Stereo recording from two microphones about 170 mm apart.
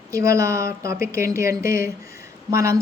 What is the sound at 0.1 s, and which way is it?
Speech, 20° right (ahead or behind).